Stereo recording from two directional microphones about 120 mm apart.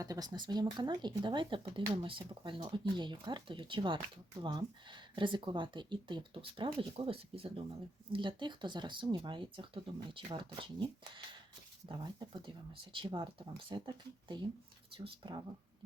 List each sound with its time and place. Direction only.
0.0 s speech: 30° right (ahead or behind)